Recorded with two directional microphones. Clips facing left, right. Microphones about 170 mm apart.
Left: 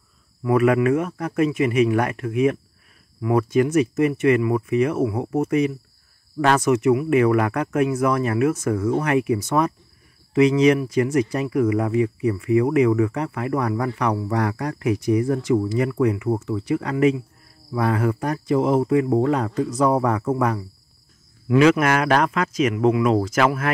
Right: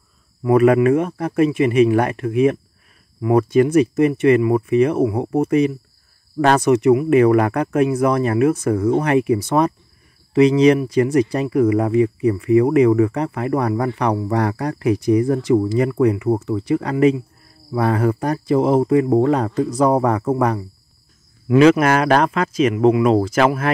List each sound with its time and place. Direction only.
0.4 s speech: 30° right (ahead or behind)